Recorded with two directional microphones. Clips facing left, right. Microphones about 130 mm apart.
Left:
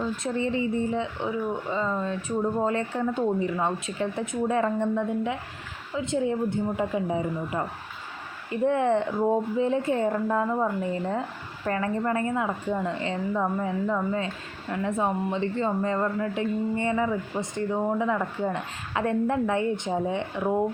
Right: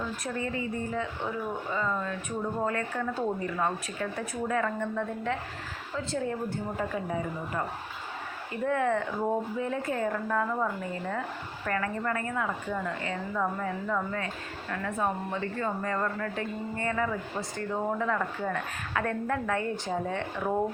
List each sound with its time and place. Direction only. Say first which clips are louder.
0.3 s speech: left 7 dB; 25° left (ahead or behind)
8.6 s speech: left 5 dB; 25° left (ahead or behind)